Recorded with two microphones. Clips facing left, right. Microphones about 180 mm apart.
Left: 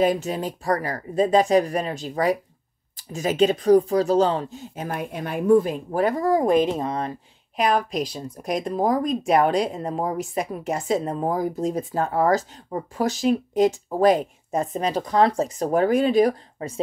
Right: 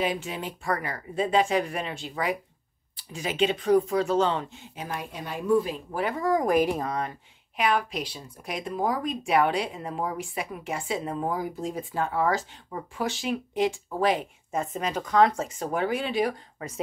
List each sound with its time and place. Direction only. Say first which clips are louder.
0.0 s a woman's voice: left 7 dB; 40° left (ahead or behind)
5.9 s a woman's voice: left 5 dB; 40° left (ahead or behind)